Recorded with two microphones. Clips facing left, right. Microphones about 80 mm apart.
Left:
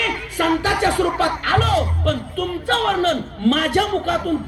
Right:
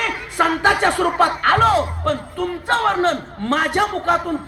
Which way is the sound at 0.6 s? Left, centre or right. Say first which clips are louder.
Right 2 dB; right.